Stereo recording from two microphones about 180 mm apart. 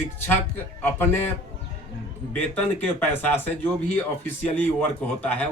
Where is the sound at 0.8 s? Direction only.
10° left (ahead or behind).